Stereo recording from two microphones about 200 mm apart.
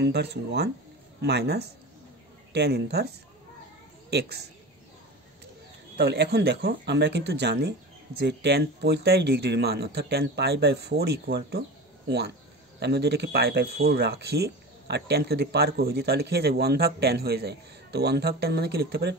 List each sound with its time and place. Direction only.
0.0 s speech: 55° right (ahead or behind)
4.1 s speech: 55° right (ahead or behind)
5.9 s speech: 55° right (ahead or behind)
12.8 s speech: 55° right (ahead or behind)